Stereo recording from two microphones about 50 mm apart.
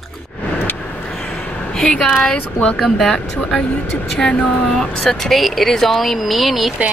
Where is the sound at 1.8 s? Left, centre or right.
Centre.